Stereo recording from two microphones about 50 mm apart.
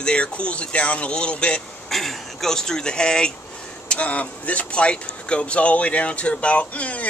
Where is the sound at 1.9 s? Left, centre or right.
Centre.